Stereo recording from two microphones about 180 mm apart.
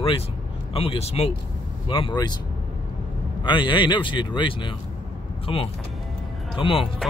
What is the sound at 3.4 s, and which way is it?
A man's voice, 25° left (ahead or behind).